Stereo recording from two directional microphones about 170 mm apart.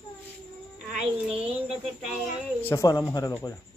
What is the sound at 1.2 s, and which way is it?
Speech, 5° right (ahead or behind).